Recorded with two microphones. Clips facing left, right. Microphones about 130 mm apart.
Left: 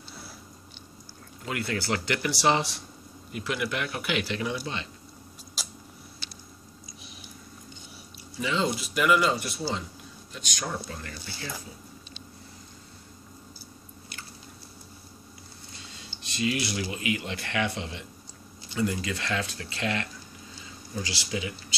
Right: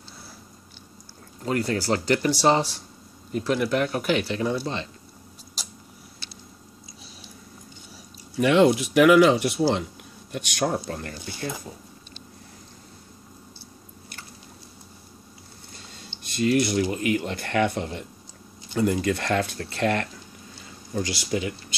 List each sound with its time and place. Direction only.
1.4 s speech: 35° right (ahead or behind)
7.0 s a sound: 30° right (ahead or behind)
8.4 s speech: 65° right (ahead or behind); by 11.1 s 50° right (ahead or behind)
16.2 s speech: 50° right (ahead or behind)